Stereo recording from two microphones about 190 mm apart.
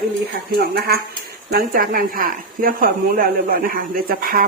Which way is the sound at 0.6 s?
55° right (ahead or behind).